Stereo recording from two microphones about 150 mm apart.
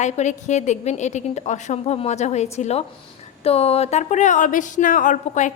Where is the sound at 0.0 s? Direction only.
50° left (ahead or behind).